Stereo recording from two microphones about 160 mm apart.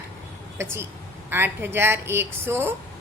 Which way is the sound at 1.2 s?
15° right (ahead or behind).